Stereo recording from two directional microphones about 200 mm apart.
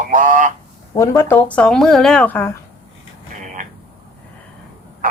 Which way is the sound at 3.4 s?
40° right (ahead or behind).